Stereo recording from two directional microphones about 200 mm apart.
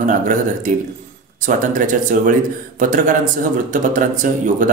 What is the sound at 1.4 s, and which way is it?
Speech, 40° right (ahead or behind).